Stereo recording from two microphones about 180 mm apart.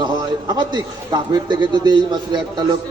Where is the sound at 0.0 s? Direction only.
25° right (ahead or behind).